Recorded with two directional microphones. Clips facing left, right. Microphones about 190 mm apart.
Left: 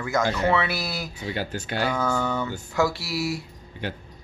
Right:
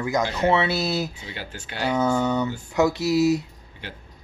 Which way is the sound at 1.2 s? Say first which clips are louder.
Left 7 dB; 45° left (ahead or behind).